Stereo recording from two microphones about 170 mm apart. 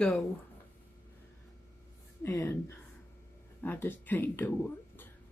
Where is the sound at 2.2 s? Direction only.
15° left (ahead or behind).